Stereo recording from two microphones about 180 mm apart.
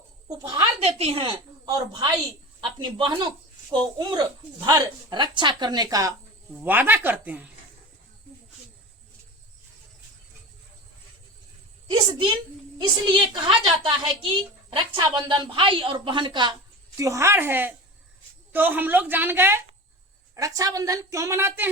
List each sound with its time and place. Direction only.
0.3 s a woman's voice: 25° right (ahead or behind)
6.5 s a woman's voice: 10° right (ahead or behind)
12.8 s a woman's voice: 25° right (ahead or behind)